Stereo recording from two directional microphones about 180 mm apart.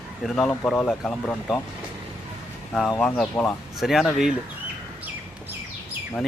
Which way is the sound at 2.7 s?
Centre (ahead or behind).